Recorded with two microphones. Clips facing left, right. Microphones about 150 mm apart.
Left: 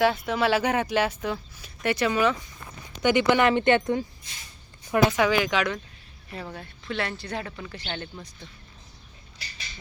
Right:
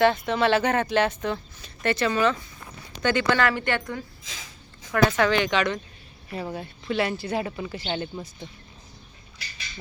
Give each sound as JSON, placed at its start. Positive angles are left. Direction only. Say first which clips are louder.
{"t": 0.0, "sound": "speech", "louder": "right 2 dB", "side_deg": 5}
{"t": 4.2, "sound": "a sound", "louder": "right 4 dB", "side_deg": -90}
{"t": 4.9, "sound": "speech", "louder": "even", "side_deg": 15}
{"t": 6.3, "sound": "speech", "louder": "right 5 dB", "side_deg": -10}